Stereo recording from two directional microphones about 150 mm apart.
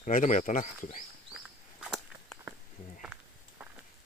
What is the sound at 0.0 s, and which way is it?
Speech, 55° left (ahead or behind).